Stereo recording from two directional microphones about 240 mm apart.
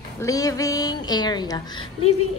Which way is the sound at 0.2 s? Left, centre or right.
Centre.